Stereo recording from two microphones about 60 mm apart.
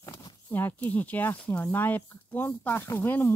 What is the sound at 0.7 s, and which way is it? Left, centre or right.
Speech, left.